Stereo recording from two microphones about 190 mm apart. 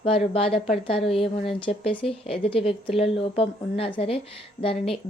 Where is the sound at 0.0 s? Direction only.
30° left (ahead or behind).